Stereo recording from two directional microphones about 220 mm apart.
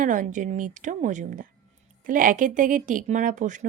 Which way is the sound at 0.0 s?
35° right (ahead or behind).